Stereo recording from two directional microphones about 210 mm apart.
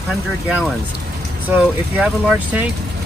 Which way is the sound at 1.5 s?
5° right (ahead or behind).